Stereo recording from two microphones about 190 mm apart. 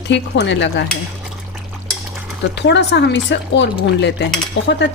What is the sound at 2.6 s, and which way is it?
Speech, 65° left (ahead or behind).